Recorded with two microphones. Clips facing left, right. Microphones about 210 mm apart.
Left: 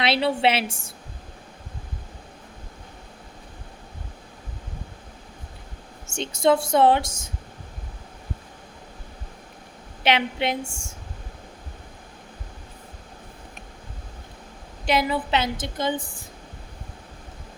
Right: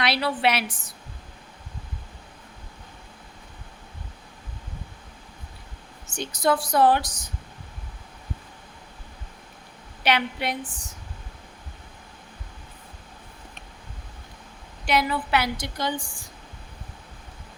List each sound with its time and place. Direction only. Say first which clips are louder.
0.0 s a woman's voice: left 3 dB; 25° left (ahead or behind)
6.1 s a woman's voice: left 4 dB; 25° left (ahead or behind)
10.0 s a woman's voice: left 2 dB; 25° left (ahead or behind)
14.8 s a woman's voice: left 1 dB; 25° left (ahead or behind)